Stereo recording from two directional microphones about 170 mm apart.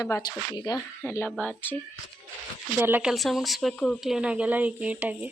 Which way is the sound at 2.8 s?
10° right (ahead or behind).